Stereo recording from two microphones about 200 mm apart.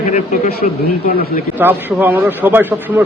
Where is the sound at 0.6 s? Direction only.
50° left (ahead or behind).